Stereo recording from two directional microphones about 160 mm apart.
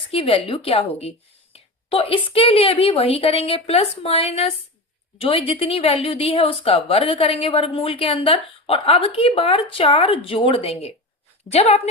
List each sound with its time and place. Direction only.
0.1 s a woman's voice: 35° left (ahead or behind)